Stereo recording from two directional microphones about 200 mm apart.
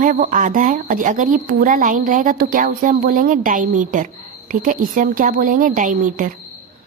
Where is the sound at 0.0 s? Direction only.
40° right (ahead or behind).